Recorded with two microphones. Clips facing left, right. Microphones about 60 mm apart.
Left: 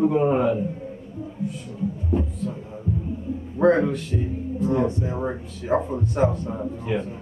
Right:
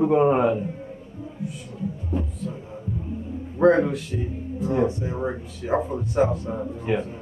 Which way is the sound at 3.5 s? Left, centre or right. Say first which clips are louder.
Right 1 dB; centre.